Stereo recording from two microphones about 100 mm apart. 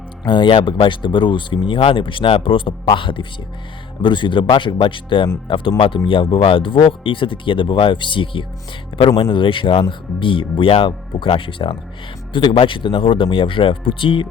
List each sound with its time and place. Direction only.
0.3 s speech: 55° left (ahead or behind)